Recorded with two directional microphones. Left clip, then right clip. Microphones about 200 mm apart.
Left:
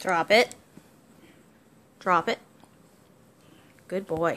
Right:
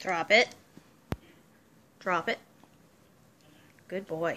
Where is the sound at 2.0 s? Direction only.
15° left (ahead or behind).